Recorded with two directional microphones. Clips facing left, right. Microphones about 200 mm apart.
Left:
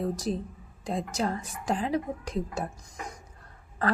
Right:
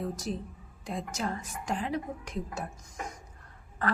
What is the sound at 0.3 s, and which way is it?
A woman's voice, 35° left (ahead or behind).